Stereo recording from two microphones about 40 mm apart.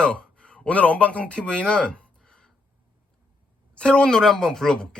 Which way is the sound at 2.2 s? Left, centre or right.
Centre.